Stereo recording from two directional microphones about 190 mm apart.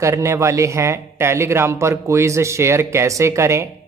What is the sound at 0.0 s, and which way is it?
Speech, 15° right (ahead or behind).